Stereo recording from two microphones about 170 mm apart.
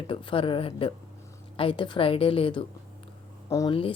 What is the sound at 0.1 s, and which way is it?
A woman's voice, 30° left (ahead or behind).